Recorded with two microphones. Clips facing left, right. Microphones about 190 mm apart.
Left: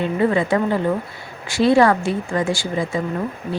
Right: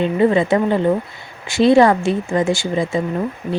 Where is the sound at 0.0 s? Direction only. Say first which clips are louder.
Right 3 dB; 20° right (ahead or behind).